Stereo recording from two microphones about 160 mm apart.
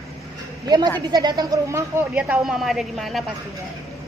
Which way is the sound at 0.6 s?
25° right (ahead or behind).